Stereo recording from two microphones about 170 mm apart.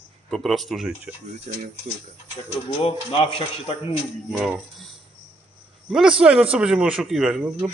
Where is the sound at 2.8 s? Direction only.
35° left (ahead or behind).